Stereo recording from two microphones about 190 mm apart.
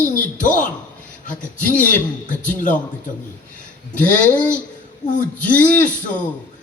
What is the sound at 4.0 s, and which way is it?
Speech, 10° left (ahead or behind).